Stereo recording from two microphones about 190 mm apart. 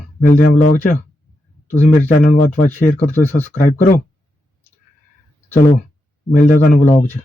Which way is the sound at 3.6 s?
45° left (ahead or behind).